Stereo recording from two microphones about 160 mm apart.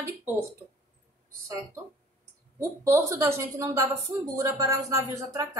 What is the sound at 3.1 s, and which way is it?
A woman's voice, 15° right (ahead or behind).